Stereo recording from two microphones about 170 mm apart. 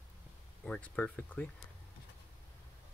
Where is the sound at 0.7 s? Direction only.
5° left (ahead or behind).